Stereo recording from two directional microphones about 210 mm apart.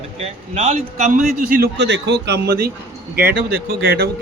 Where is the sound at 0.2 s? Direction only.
30° right (ahead or behind).